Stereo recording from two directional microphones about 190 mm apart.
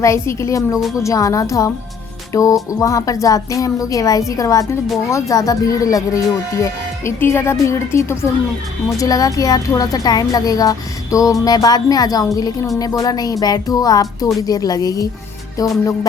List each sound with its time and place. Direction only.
0.0 s speech: 15° left (ahead or behind)